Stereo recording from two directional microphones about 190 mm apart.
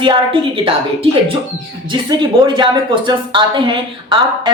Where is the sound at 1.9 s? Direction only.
25° right (ahead or behind).